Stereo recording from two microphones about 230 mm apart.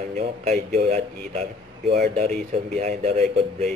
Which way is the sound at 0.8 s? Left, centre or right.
Right.